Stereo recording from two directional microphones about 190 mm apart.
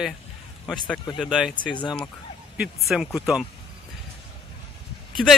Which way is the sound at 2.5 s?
5° right (ahead or behind).